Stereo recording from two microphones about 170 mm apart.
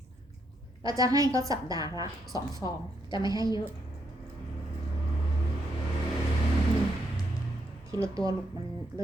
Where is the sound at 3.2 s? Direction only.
20° right (ahead or behind).